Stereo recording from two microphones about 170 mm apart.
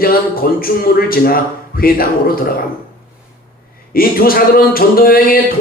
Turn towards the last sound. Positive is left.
turn(degrees=60)  # may be behind; listen again after turning